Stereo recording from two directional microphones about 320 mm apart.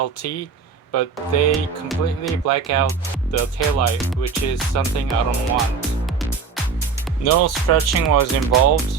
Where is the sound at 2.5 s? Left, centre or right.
Left.